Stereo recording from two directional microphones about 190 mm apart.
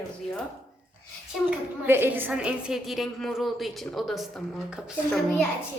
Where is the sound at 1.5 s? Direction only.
10° right (ahead or behind).